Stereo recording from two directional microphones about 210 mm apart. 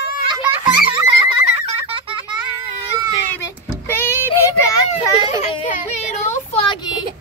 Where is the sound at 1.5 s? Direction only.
30° right (ahead or behind).